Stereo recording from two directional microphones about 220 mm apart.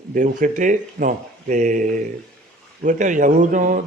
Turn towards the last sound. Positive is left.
turn(degrees=-35)  # may be behind; listen again after turning